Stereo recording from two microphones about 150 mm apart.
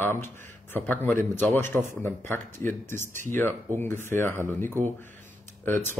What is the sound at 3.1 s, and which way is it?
Speech, 60° right (ahead or behind).